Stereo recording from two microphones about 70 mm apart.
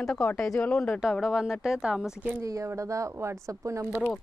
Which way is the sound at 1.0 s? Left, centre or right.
Centre.